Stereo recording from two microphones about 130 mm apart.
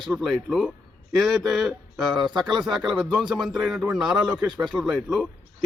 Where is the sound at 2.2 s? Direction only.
35° right (ahead or behind).